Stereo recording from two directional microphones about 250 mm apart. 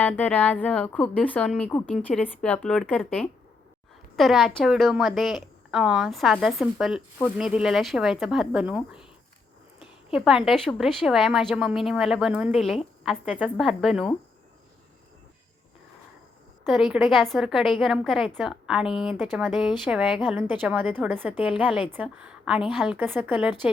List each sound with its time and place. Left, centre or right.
0.0 s a woman's voice: centre
10.1 s a woman's voice: centre
16.6 s a woman's voice: centre